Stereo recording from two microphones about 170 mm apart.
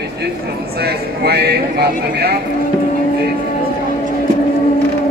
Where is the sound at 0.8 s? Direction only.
70° right (ahead or behind).